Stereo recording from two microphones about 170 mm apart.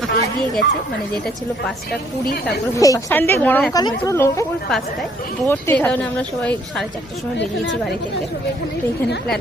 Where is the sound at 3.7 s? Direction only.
20° left (ahead or behind).